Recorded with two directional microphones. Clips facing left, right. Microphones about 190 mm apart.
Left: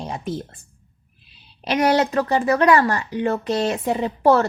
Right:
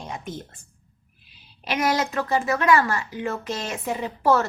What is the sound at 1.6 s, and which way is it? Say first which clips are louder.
A woman's voice: left 6 dB; 35° left (ahead or behind).